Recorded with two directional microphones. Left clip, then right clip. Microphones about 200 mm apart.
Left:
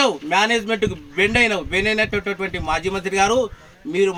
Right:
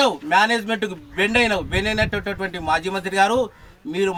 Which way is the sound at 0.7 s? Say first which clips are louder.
Left 3 dB; 5° right (ahead or behind).